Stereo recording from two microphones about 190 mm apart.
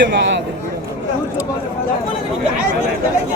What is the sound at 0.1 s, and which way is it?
Speech, 70° right (ahead or behind).